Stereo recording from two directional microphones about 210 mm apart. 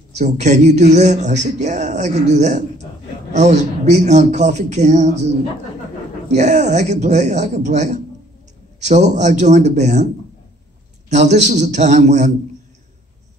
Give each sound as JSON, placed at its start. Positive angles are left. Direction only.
{"t": 0.2, "sound": "a man's voice", "side_deg": -35}
{"t": 6.3, "sound": "a man's voice", "side_deg": -35}
{"t": 11.1, "sound": "a man's voice", "side_deg": -35}